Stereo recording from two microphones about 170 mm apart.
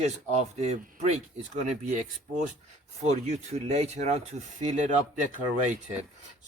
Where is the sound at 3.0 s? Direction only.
40° right (ahead or behind).